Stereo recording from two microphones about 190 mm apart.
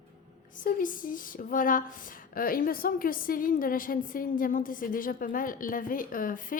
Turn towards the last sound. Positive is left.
turn(degrees=45)  # may be behind; listen again after turning